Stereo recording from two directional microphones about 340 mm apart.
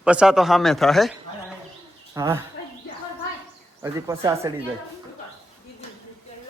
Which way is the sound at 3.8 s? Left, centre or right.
Centre.